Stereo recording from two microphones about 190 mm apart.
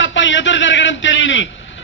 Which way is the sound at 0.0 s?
80° left.